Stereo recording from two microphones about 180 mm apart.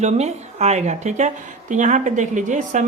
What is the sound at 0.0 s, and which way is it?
A woman's voice, 40° right (ahead or behind).